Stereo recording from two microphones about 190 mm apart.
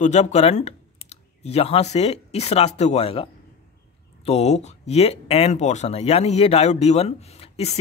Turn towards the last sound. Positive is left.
turn(degrees=35)  # may be behind; listen again after turning